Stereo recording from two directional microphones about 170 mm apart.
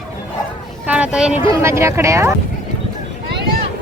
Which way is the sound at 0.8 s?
5° right (ahead or behind).